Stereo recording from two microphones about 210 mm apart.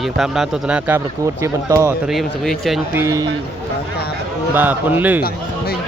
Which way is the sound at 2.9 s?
10° right (ahead or behind).